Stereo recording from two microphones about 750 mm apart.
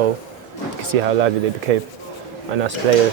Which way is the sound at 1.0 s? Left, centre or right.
Right.